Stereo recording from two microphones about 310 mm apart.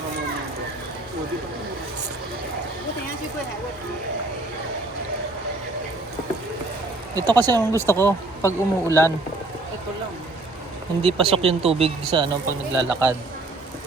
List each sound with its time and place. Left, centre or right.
7.2 s speech: centre
7.9 s speech: centre
11.0 s speech: centre